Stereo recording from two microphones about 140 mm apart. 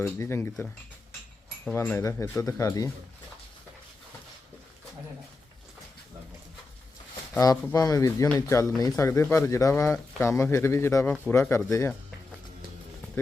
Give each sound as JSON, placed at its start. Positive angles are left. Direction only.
{"t": 0.0, "sound": "speech", "side_deg": 20}
{"t": 1.6, "sound": "speech", "side_deg": 15}
{"t": 7.3, "sound": "speech", "side_deg": 25}